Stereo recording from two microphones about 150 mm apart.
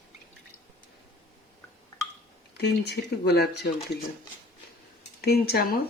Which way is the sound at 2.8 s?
90° left.